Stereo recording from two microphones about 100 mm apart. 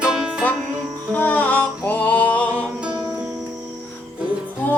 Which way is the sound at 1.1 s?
15° left (ahead or behind).